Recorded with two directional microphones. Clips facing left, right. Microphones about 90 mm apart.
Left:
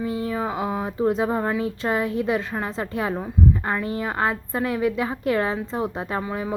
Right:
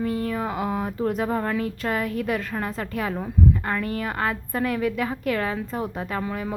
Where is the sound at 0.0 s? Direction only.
20° left (ahead or behind).